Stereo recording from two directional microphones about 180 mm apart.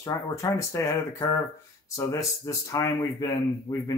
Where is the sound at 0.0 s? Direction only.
20° left (ahead or behind).